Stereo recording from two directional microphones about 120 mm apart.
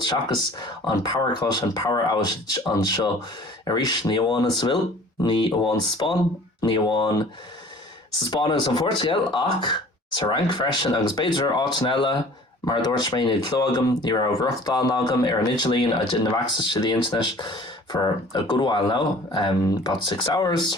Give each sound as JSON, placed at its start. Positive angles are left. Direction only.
{"t": 0.0, "sound": "speech", "side_deg": 40}
{"t": 8.3, "sound": "speech", "side_deg": 40}